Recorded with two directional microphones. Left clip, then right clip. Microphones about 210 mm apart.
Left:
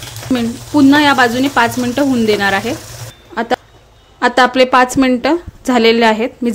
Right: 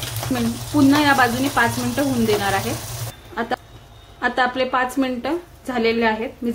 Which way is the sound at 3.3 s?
45° left (ahead or behind).